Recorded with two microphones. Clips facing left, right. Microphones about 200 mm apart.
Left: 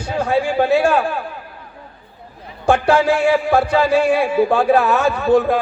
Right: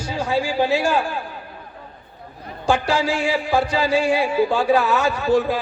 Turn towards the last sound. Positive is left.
turn(degrees=60)  # may be behind; listen again after turning